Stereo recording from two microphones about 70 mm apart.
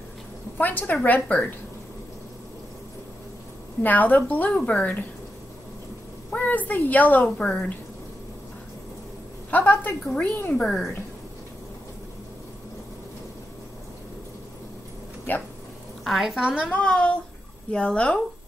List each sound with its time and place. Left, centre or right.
0.6 s a woman's voice: left
3.8 s a woman's voice: left
6.3 s a woman's voice: left
7.3 s speech: centre
9.5 s a woman's voice: left
15.3 s speech: left
16.0 s a woman's voice: centre
16.7 s speech: centre